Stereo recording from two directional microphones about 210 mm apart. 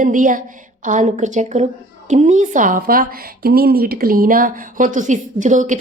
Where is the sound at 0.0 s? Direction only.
40° right (ahead or behind).